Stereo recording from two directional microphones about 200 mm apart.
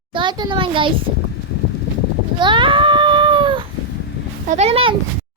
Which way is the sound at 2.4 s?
25° right (ahead or behind).